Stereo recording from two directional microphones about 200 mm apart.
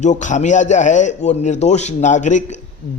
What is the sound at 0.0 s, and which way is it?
Speech, 35° left (ahead or behind).